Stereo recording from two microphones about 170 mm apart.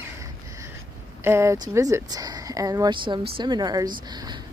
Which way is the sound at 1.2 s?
15° right (ahead or behind).